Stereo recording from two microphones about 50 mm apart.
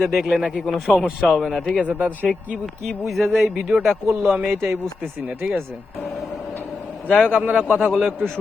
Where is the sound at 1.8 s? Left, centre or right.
Right.